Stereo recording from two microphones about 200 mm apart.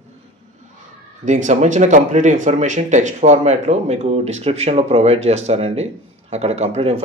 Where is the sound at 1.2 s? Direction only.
40° right (ahead or behind).